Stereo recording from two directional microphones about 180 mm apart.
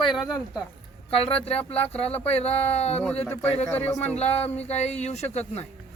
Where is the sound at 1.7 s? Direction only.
5° left (ahead or behind).